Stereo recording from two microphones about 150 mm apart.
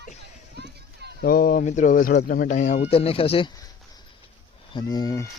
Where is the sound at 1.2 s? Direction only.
80° left.